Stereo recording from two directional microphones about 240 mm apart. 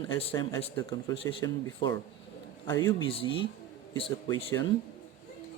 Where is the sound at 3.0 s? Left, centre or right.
Left.